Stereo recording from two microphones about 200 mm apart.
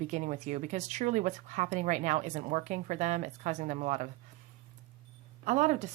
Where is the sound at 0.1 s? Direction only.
35° right (ahead or behind).